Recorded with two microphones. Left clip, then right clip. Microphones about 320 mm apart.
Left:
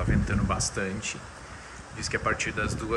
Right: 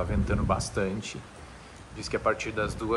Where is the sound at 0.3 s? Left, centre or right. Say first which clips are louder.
Right 1 dB; centre.